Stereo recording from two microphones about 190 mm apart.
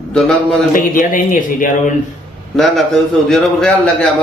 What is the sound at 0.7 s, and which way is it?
Speech, 45° left (ahead or behind).